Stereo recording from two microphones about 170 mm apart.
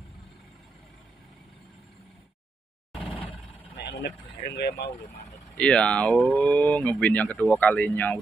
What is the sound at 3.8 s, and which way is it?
Speech, 75° left (ahead or behind).